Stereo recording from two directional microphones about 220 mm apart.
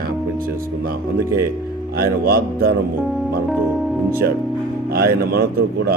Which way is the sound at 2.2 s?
45° right (ahead or behind).